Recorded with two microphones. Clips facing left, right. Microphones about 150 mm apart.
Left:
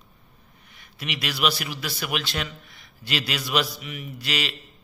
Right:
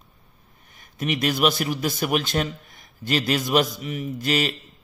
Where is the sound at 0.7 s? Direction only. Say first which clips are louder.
Right 8 dB; 45° right (ahead or behind).